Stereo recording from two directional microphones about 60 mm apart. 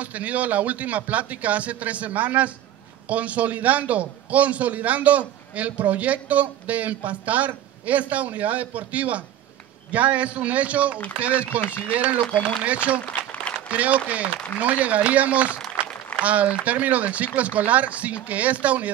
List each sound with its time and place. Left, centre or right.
0.0 s a man's voice: right